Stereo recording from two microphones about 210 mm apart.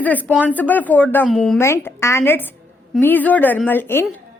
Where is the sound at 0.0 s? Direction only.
10° left (ahead or behind).